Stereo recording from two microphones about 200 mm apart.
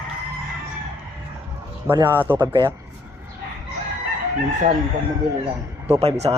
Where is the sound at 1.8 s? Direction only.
10° right (ahead or behind).